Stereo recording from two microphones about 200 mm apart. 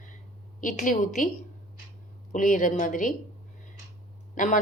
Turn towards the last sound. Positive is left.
turn(degrees=40)  # may be behind; listen again after turning